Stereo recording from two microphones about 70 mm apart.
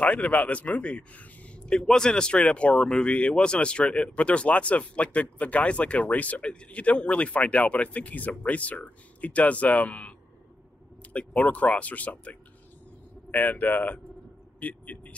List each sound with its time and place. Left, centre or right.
0.0 s a man's voice: left
11.1 s a man's voice: centre